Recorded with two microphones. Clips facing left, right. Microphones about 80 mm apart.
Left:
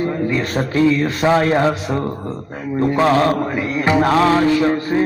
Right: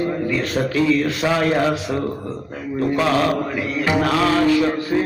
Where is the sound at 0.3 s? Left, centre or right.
Left.